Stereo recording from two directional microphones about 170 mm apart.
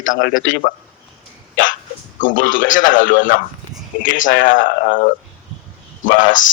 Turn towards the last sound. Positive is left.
turn(degrees=50)  # may be behind; listen again after turning